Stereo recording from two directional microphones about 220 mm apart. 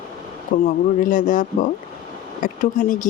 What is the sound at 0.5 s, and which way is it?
Speech, 50° left (ahead or behind).